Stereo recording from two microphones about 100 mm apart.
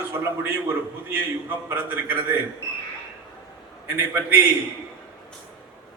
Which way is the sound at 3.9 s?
25° right (ahead or behind).